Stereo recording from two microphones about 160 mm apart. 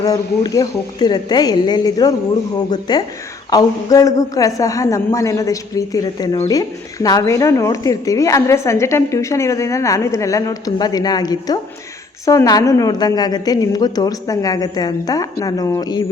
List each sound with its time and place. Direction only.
0.0 s a woman's voice: 20° left (ahead or behind)